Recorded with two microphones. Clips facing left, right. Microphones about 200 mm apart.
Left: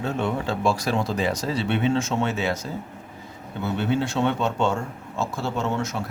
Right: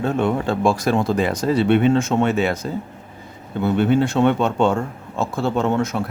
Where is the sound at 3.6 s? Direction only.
55° right (ahead or behind).